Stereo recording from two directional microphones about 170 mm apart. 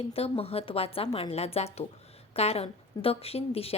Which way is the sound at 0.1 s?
35° left (ahead or behind).